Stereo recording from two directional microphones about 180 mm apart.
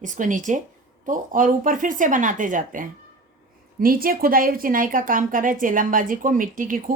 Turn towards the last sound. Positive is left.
turn(degrees=-50)  # may be behind; listen again after turning